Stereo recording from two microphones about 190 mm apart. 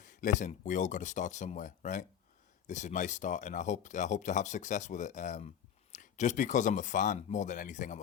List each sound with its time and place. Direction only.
0.0 s speech: 40° left (ahead or behind)